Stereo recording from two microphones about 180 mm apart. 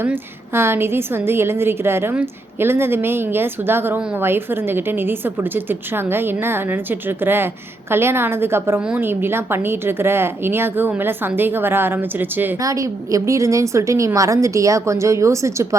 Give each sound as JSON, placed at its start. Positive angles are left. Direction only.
{"t": 0.0, "sound": "a woman's voice", "side_deg": -15}